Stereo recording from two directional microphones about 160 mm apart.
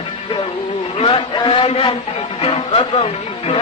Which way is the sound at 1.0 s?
35° left (ahead or behind).